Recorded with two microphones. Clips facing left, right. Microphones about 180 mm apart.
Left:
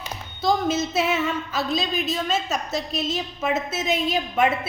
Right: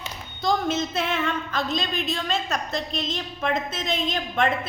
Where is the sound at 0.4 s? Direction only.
5° left (ahead or behind).